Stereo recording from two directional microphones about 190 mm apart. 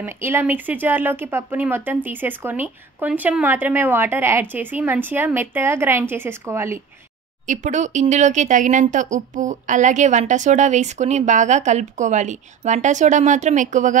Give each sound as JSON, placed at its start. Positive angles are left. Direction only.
{"t": 0.0, "sound": "speech", "side_deg": -10}
{"t": 7.4, "sound": "speech", "side_deg": -40}